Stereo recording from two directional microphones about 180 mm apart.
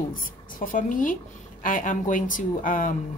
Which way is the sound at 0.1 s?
50° left (ahead or behind).